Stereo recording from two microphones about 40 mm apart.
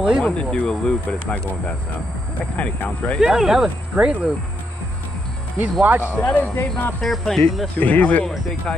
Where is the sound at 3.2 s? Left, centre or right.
Centre.